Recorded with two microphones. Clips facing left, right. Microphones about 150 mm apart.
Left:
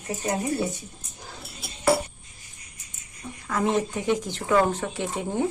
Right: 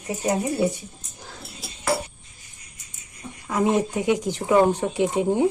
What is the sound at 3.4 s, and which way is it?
Speech, 15° right (ahead or behind).